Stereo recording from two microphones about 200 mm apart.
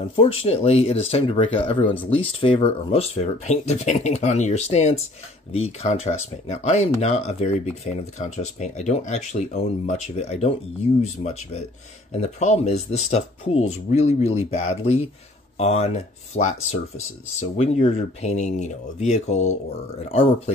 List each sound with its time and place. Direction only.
0.1 s speech: 30° left (ahead or behind)